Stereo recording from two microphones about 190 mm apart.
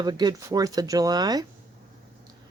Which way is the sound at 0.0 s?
20° right (ahead or behind).